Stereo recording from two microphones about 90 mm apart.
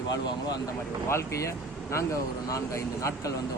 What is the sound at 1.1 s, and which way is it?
A man's voice, 35° left (ahead or behind).